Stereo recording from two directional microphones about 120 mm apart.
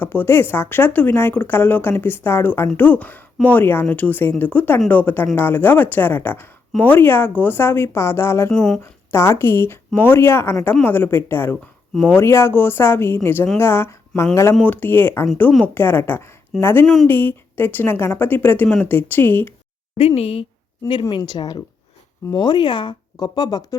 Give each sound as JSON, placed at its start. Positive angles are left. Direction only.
{"t": 0.0, "sound": "speech", "side_deg": 20}
{"t": 8.5, "sound": "a woman's voice", "side_deg": 5}
{"t": 8.8, "sound": "a woman's voice", "side_deg": 20}
{"t": 16.8, "sound": "a woman's voice", "side_deg": 0}
{"t": 17.1, "sound": "speech", "side_deg": 15}
{"t": 20.0, "sound": "speech", "side_deg": 55}
{"t": 20.8, "sound": "speech", "side_deg": 45}